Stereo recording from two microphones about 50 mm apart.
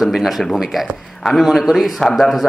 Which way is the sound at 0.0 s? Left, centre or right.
Centre.